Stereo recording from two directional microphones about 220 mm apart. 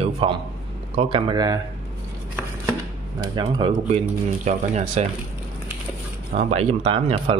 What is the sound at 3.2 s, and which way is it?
Speech, 20° right (ahead or behind).